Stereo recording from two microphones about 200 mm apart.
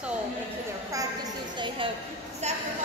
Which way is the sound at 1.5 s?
25° right (ahead or behind).